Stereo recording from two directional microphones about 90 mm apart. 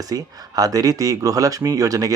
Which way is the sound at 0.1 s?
45° right (ahead or behind).